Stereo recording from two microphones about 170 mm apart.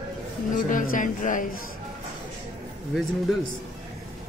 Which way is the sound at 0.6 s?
50° left (ahead or behind).